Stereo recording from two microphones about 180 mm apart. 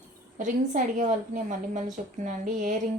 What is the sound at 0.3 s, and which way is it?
A woman's voice, 45° right (ahead or behind).